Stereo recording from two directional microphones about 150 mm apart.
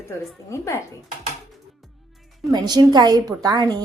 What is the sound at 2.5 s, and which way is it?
A woman's voice, 25° right (ahead or behind).